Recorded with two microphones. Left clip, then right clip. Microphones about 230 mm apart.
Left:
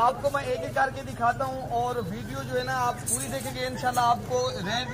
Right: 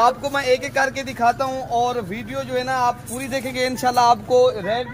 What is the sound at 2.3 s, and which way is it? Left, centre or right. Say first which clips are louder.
Speech: right 6 dB; right.